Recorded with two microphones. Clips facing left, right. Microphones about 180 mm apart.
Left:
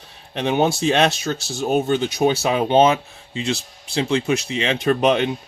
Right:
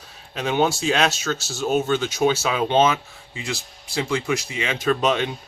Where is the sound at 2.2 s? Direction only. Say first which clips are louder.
Left 2 dB; 35° left (ahead or behind).